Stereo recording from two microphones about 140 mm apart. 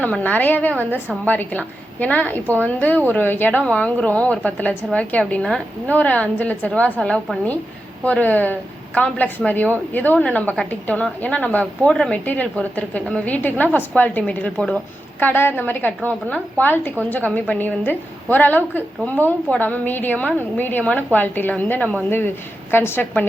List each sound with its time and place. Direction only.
0.0 s a woman's voice: 10° left (ahead or behind)